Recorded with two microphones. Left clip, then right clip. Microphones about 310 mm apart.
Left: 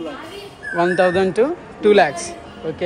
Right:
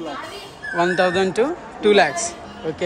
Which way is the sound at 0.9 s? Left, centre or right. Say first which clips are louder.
Left 3 dB; centre.